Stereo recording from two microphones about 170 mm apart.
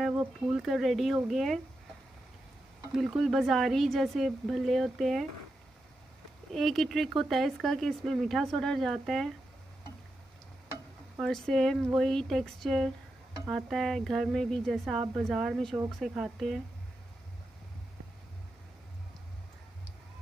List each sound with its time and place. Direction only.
0.0 s speech: 5° right (ahead or behind)
2.9 s speech: centre (ahead or behind)
6.5 s speech: centre (ahead or behind)
11.1 s speech: 5° left (ahead or behind)